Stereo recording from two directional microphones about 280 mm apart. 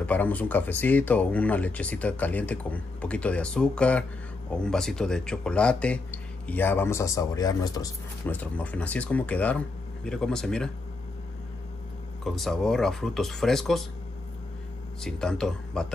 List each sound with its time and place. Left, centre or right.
0.0 s speech: centre
12.3 s speech: centre
15.0 s speech: centre